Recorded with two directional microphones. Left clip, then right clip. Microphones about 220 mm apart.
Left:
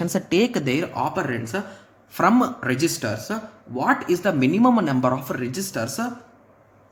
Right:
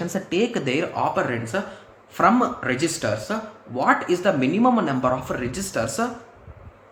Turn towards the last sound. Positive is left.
turn(degrees=15)  # may be behind; listen again after turning